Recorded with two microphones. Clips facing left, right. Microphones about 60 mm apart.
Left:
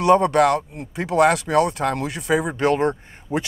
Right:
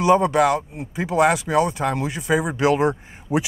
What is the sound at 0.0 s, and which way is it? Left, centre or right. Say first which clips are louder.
Speech: left 1 dB; centre.